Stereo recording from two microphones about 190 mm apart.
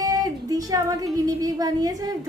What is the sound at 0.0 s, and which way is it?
Music, 20° right (ahead or behind).